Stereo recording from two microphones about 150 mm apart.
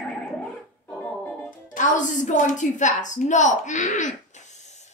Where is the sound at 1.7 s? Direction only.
60° left (ahead or behind).